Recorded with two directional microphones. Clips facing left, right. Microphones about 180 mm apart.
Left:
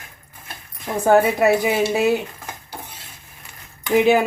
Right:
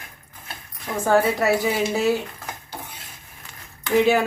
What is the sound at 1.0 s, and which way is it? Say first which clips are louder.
Speech: left 4 dB; 20° left (ahead or behind).